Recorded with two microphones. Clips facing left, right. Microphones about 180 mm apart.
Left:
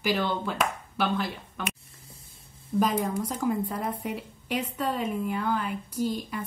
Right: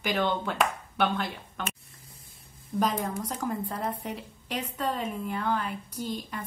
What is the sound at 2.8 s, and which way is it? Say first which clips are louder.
A woman's voice: left 3 dB; 10° left (ahead or behind).